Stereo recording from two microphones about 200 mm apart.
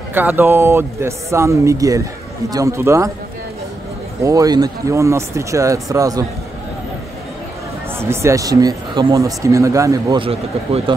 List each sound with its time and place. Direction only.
0.1 s speech: 10° right (ahead or behind)
4.2 s speech: 15° right (ahead or behind)
8.0 s speech: 15° right (ahead or behind)